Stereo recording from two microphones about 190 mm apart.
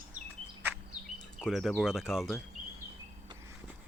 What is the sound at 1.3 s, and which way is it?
Speech, 5° right (ahead or behind).